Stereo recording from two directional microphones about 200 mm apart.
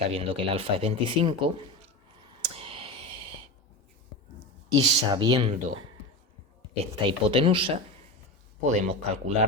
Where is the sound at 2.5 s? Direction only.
25° right (ahead or behind).